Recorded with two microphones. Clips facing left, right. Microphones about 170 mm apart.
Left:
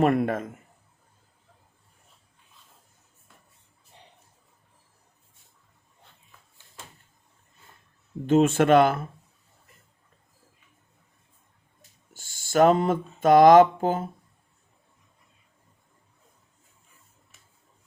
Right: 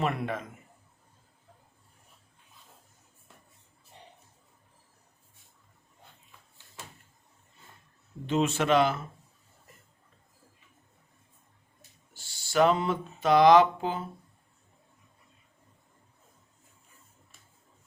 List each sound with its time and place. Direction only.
0.0 s speech: 50° left (ahead or behind)
8.3 s speech: 50° left (ahead or behind)
12.1 s speech: 45° left (ahead or behind)